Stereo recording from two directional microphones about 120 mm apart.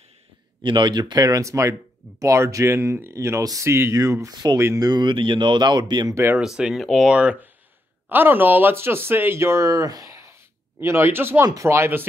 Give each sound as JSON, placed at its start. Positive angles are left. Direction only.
{"t": 0.7, "sound": "speech", "side_deg": -40}
{"t": 6.3, "sound": "speech", "side_deg": -5}